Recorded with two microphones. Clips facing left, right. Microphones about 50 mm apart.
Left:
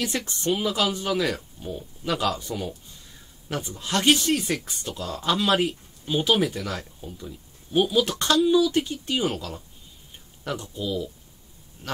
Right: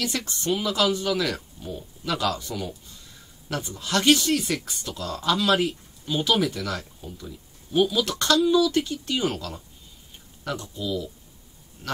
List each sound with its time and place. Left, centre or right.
0.0 s speech: left